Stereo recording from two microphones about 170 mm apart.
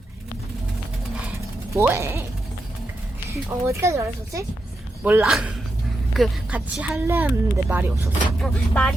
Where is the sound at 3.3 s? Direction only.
15° right (ahead or behind).